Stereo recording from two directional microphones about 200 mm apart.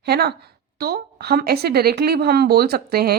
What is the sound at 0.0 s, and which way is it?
Speech, 55° right (ahead or behind).